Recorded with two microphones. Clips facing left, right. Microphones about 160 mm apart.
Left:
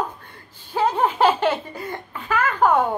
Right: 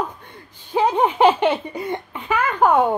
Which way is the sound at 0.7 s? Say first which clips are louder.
Right 3 dB; 15° right (ahead or behind).